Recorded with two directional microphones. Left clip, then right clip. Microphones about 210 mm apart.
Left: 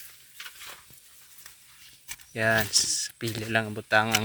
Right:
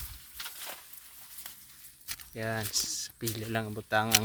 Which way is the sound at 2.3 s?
10° left (ahead or behind).